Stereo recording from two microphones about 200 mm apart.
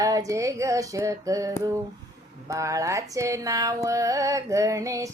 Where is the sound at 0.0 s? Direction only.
15° right (ahead or behind).